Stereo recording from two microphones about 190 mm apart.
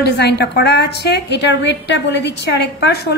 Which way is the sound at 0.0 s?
60° left (ahead or behind).